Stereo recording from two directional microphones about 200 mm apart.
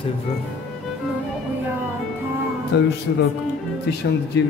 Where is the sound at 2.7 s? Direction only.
60° left (ahead or behind).